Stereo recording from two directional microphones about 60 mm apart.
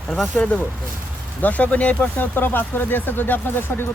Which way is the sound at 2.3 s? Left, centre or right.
Left.